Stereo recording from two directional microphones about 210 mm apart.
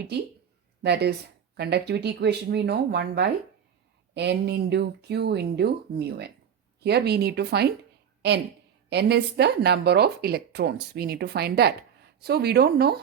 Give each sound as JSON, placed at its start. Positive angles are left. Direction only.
{"t": 0.1, "sound": "speech", "side_deg": -50}
{"t": 8.9, "sound": "speech", "side_deg": -50}